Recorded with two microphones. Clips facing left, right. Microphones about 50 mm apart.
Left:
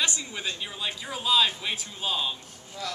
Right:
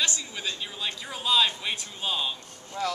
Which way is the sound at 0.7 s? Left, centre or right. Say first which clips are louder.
Left 1 dB; centre.